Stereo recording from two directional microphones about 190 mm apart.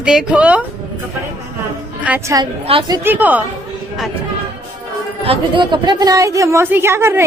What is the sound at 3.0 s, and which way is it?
Speech, 10° right (ahead or behind).